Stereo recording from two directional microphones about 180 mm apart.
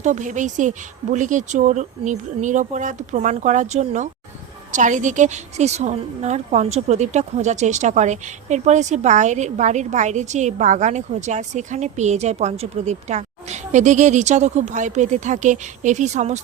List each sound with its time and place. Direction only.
0.0 s a woman's voice: 45° right (ahead or behind)